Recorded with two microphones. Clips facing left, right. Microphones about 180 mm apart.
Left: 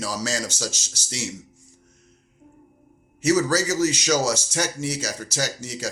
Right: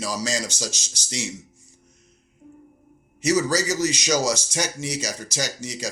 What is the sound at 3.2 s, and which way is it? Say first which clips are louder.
Speech: left 1 dB; 10° right (ahead or behind).